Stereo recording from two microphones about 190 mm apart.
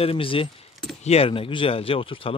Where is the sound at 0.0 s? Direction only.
30° left (ahead or behind).